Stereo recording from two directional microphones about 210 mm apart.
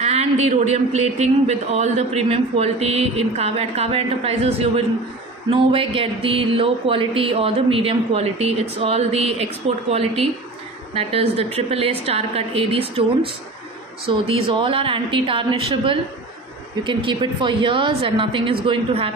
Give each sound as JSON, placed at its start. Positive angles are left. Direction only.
{"t": 0.0, "sound": "a man's voice", "side_deg": -30}
{"t": 14.0, "sound": "a man's voice", "side_deg": -30}